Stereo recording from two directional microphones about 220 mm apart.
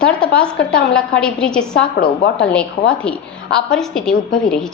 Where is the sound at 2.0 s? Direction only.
50° left (ahead or behind).